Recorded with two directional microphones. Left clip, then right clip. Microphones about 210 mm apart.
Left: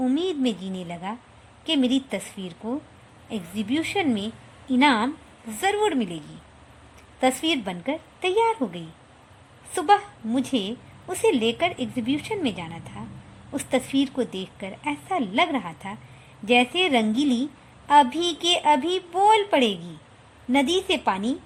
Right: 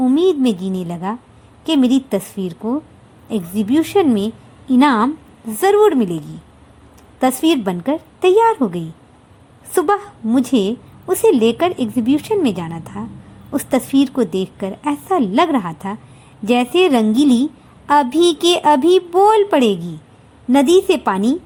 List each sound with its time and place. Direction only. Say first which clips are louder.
0.0 s a woman's voice: right 10 dB; 15° right (ahead or behind)